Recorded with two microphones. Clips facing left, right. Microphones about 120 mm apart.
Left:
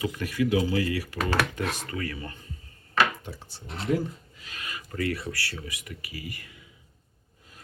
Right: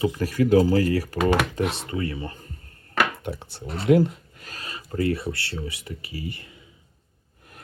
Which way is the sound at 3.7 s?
90° right.